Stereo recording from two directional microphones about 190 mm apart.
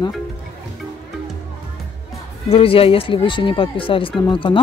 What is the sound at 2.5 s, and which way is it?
Speech, 30° left (ahead or behind).